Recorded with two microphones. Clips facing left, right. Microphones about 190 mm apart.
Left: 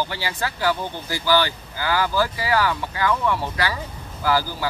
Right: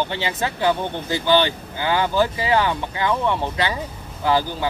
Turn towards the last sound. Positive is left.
turn(degrees=-20)  # may be behind; listen again after turning